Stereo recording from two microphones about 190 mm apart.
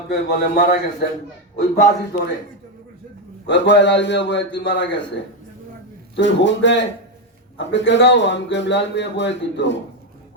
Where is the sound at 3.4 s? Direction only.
65° left (ahead or behind).